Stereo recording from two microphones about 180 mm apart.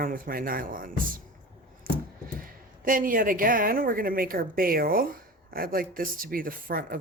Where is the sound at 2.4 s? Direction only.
50° right (ahead or behind).